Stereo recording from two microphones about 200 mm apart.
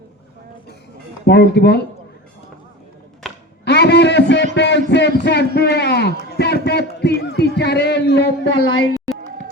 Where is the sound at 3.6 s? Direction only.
55° left (ahead or behind).